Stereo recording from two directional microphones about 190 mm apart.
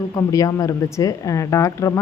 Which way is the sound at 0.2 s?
20° left (ahead or behind).